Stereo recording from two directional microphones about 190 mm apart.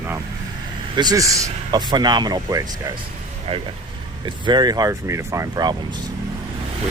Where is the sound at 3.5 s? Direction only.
30° right (ahead or behind).